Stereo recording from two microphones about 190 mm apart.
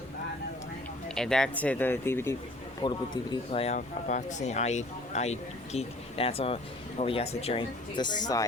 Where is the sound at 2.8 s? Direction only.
25° left (ahead or behind).